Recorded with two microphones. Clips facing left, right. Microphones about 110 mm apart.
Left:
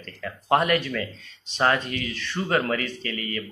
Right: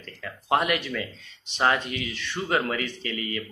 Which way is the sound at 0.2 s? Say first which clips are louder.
Left 2 dB; 10° right (ahead or behind).